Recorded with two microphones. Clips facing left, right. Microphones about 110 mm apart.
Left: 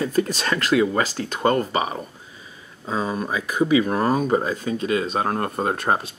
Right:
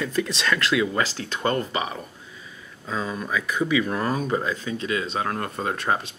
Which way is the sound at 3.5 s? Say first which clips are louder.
Left 5 dB; 30° left (ahead or behind).